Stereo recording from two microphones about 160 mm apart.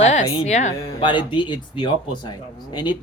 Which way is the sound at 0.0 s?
45° left (ahead or behind).